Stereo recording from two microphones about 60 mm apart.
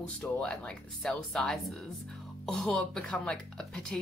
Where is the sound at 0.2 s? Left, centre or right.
Centre.